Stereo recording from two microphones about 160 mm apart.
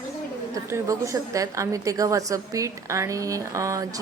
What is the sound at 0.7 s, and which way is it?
A woman's voice, 20° right (ahead or behind).